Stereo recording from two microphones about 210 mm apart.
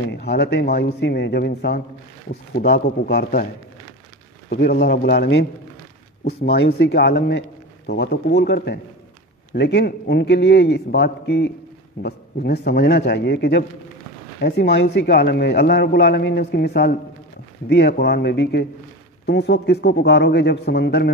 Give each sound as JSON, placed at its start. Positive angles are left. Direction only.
{"t": 0.1, "sound": "a man's voice", "side_deg": 50}
{"t": 2.7, "sound": "a man's voice", "side_deg": 50}
{"t": 4.5, "sound": "a man's voice", "side_deg": 50}